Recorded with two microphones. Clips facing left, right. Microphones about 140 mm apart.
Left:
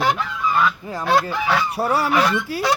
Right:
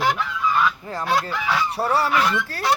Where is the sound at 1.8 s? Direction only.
15° left (ahead or behind).